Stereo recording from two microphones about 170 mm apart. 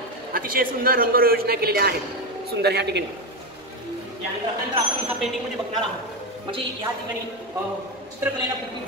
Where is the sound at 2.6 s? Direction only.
80° right.